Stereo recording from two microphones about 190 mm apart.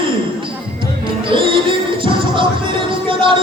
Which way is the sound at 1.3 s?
25° right (ahead or behind).